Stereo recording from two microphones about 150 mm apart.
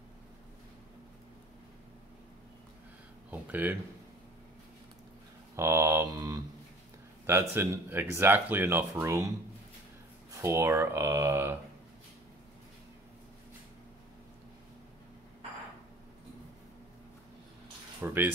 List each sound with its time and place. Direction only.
3.3 s speech: 10° right (ahead or behind)
5.6 s speech: 20° right (ahead or behind)
10.3 s speech: 20° right (ahead or behind)
18.0 s speech: 15° right (ahead or behind)